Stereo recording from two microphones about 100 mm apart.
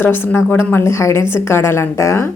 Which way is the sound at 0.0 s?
20° left (ahead or behind).